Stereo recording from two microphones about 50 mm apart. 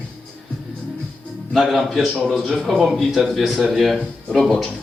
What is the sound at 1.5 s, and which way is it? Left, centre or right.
A man's voice, centre.